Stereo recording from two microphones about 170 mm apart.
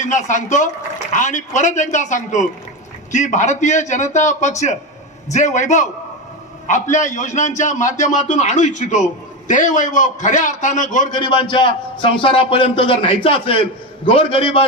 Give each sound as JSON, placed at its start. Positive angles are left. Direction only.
{"t": 0.0, "sound": "speech", "side_deg": 45}
{"t": 11.1, "sound": "a man's voice", "side_deg": 30}